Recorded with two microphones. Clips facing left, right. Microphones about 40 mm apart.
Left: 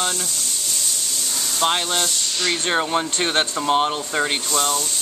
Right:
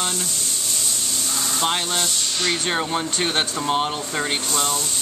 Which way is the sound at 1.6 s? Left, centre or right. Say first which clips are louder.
Left 3 dB; centre.